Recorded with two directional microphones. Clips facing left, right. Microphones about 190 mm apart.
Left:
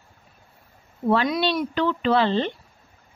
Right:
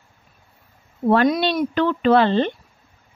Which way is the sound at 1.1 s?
55° right (ahead or behind).